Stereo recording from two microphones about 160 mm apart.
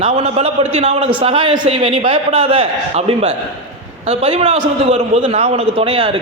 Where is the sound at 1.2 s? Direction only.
35° right (ahead or behind).